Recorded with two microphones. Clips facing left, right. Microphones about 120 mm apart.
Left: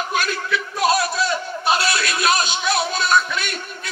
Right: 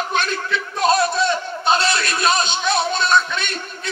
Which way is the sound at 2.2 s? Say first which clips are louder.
Right 1 dB; 10° left (ahead or behind).